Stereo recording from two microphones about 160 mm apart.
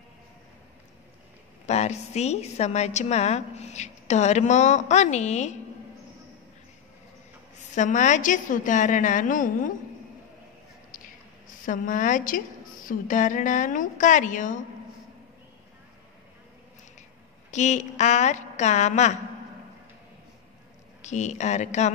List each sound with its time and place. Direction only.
1.7 s a woman's voice: 45° left (ahead or behind)
7.7 s a woman's voice: 50° left (ahead or behind)
11.4 s a woman's voice: 55° left (ahead or behind)
17.5 s a woman's voice: 45° left (ahead or behind)
21.0 s a woman's voice: 45° left (ahead or behind)